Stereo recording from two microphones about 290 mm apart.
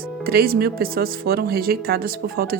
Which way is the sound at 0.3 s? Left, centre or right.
Right.